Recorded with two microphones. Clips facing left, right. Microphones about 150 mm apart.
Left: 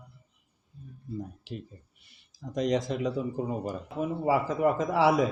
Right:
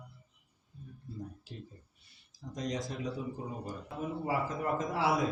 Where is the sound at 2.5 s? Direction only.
80° left.